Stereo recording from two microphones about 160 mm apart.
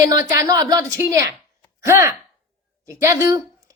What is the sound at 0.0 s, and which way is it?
A woman's voice, 20° right (ahead or behind).